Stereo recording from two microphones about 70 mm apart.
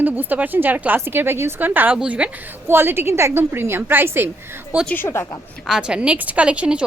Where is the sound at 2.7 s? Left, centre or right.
Right.